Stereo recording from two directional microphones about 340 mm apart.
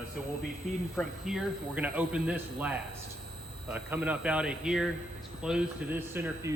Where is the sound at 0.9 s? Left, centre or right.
Centre.